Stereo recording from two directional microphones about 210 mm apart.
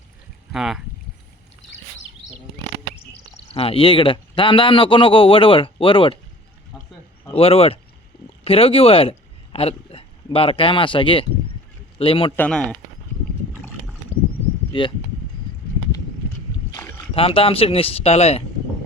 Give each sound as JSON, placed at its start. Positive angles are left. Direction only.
{"t": 0.5, "sound": "speech", "side_deg": 0}
{"t": 3.3, "sound": "speech", "side_deg": 25}
{"t": 7.3, "sound": "speech", "side_deg": 25}
{"t": 8.1, "sound": "a sound", "side_deg": 45}
{"t": 8.4, "sound": "speech", "side_deg": 25}
{"t": 12.4, "sound": "speech", "side_deg": 5}
{"t": 14.7, "sound": "speech", "side_deg": 25}
{"t": 17.2, "sound": "speech", "side_deg": 25}